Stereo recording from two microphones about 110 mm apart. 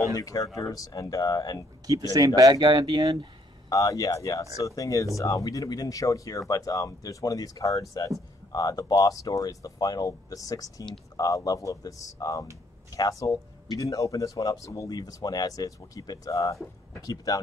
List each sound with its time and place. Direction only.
0.1 s speech: 30° left (ahead or behind)
2.1 s speech: 35° right (ahead or behind)
3.7 s speech: 35° left (ahead or behind)